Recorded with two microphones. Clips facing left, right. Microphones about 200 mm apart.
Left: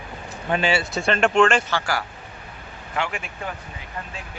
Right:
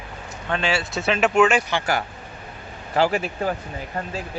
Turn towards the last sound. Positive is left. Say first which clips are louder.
# right 8 dB
turn(degrees=-35)  # may be behind; listen again after turning